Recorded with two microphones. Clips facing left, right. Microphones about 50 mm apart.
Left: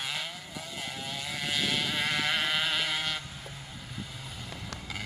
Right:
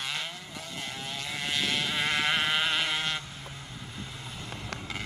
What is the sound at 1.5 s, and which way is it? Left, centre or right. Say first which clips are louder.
Sheep: right 1 dB; centre.